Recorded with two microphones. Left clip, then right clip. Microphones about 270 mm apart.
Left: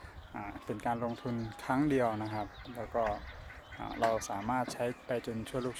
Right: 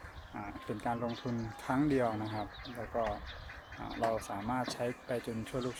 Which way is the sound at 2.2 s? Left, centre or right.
Centre.